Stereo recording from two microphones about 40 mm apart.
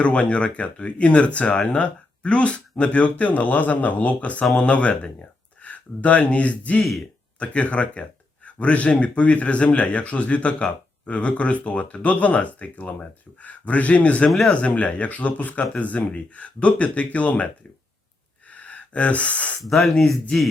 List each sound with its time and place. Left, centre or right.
0.0 s speech: left
14.3 s speech: centre
14.5 s speech: left
18.5 s gasp: left
19.6 s speech: centre